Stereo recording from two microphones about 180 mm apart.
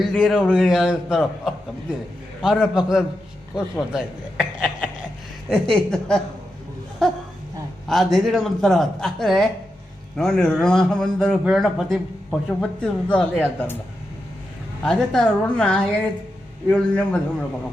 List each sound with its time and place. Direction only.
0.0 s a man's voice: centre (ahead or behind)
14.8 s a man's voice: 5° left (ahead or behind)